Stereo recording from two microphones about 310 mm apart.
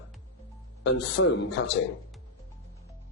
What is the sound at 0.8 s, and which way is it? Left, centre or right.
Speech, left.